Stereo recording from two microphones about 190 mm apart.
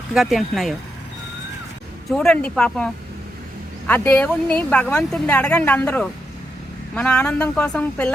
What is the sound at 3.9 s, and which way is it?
A woman's voice, 10° left (ahead or behind).